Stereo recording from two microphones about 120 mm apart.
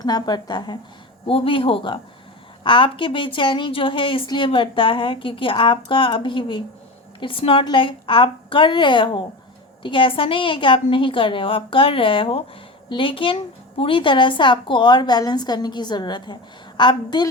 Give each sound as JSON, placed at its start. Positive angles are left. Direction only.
{"t": 0.0, "sound": "a woman's voice", "side_deg": 35}
{"t": 1.3, "sound": "a woman's voice", "side_deg": 50}